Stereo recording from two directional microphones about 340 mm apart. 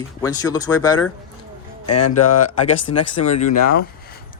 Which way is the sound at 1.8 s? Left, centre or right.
Left.